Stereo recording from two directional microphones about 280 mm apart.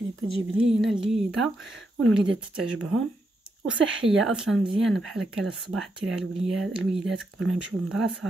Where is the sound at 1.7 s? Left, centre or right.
Right.